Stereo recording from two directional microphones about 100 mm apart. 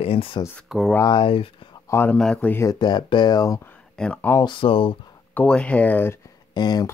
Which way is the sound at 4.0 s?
10° left (ahead or behind).